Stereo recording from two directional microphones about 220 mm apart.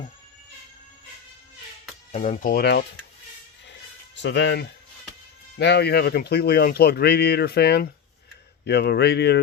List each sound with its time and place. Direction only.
2.1 s speech: 35° left (ahead or behind)
4.1 s a man's voice: 55° left (ahead or behind)